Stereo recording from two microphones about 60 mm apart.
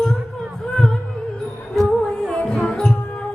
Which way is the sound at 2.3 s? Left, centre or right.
Centre.